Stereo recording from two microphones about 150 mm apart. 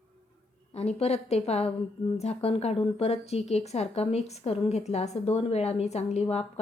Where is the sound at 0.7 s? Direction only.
45° left (ahead or behind).